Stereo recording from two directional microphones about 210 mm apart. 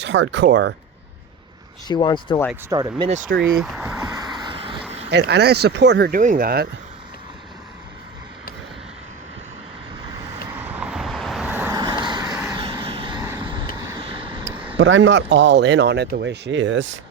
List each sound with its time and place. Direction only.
0.0 s speech: 60° right (ahead or behind)
1.9 s speech: 20° left (ahead or behind)
2.6 s speech: 20° right (ahead or behind)
3.6 s a sound: 5° right (ahead or behind); by 4.8 s 25° right (ahead or behind)
4.9 s vehicle: 30° right (ahead or behind)
5.1 s speech: 55° right (ahead or behind)
10.6 s vehicle: 5° right (ahead or behind)
11.8 s vehicle: 20° right (ahead or behind)
14.8 s speech: 65° right (ahead or behind)